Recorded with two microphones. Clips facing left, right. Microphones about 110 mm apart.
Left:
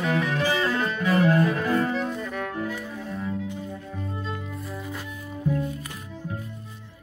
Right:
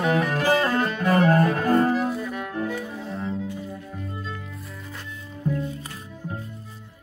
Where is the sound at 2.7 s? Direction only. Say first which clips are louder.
Right 2 dB; 20° right (ahead or behind).